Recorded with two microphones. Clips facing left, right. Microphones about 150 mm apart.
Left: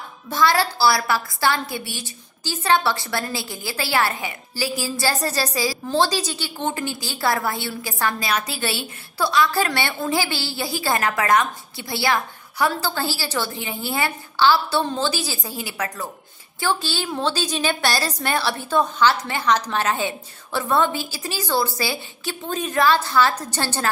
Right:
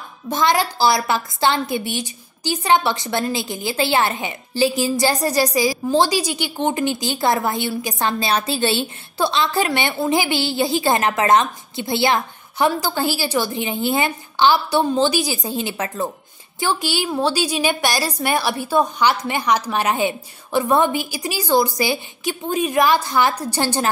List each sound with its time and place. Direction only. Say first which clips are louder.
0.3 s a woman's voice: right 1 dB; 20° right (ahead or behind)